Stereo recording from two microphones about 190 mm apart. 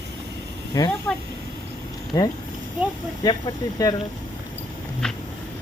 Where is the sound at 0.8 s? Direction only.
20° left (ahead or behind).